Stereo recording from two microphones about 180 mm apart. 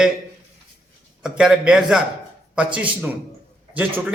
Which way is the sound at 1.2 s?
5° right (ahead or behind).